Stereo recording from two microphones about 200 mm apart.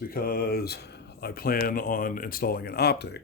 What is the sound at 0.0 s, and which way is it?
Speech, 45° left (ahead or behind).